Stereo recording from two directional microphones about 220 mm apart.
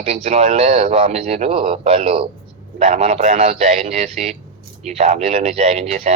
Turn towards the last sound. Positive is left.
turn(degrees=-30)  # may be behind; listen again after turning